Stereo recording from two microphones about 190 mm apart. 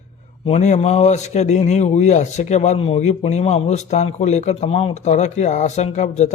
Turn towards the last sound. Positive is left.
turn(degrees=35)  # may be behind; listen again after turning